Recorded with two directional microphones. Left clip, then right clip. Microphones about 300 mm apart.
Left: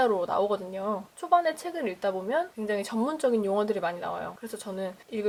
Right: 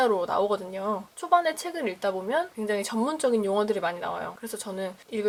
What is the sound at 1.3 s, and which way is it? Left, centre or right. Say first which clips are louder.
Speech: right 1 dB; centre.